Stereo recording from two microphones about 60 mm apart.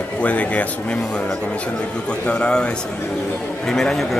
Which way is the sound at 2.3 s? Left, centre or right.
Centre.